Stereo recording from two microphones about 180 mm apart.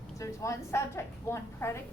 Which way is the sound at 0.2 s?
15° left (ahead or behind).